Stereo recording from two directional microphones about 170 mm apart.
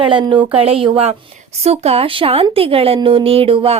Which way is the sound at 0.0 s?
30° right (ahead or behind).